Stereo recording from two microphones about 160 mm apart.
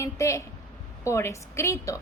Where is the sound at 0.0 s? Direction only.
20° left (ahead or behind).